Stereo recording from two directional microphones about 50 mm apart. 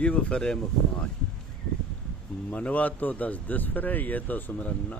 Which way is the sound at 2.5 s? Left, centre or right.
Left.